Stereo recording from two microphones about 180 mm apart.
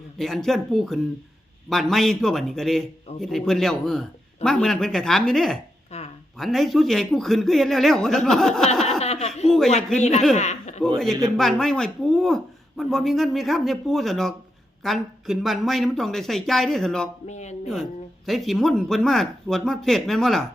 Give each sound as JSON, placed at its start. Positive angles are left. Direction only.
{"t": 0.2, "sound": "speech", "side_deg": 0}
{"t": 5.9, "sound": "a sound", "side_deg": 35}
{"t": 6.3, "sound": "speech", "side_deg": 0}
{"t": 10.0, "sound": "a man's voice", "side_deg": 40}
{"t": 10.3, "sound": "chuckle", "side_deg": 40}
{"t": 10.9, "sound": "speech", "side_deg": 0}
{"t": 17.2, "sound": "a man's voice", "side_deg": 40}
{"t": 18.3, "sound": "speech", "side_deg": 0}